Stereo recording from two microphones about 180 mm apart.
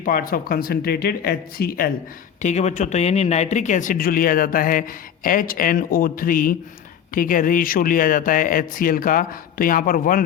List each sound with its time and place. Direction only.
0.0 s speech: 50° left (ahead or behind)
2.4 s speech: 40° left (ahead or behind)